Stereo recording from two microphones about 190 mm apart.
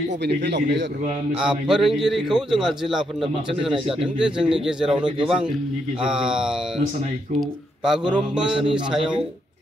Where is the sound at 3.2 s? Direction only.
25° right (ahead or behind).